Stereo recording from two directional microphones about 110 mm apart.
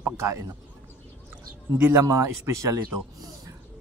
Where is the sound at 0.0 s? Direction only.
25° right (ahead or behind).